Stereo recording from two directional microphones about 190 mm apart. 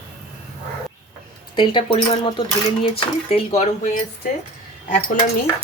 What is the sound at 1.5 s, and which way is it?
Speech, 25° left (ahead or behind).